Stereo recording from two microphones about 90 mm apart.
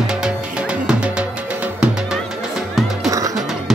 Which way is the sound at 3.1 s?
40° right (ahead or behind).